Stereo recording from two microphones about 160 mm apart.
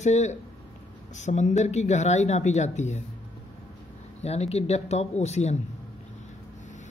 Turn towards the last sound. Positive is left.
turn(degrees=45)  # may be behind; listen again after turning